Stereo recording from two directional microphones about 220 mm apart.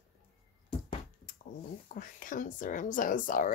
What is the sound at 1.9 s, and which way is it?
Speech, 40° left (ahead or behind).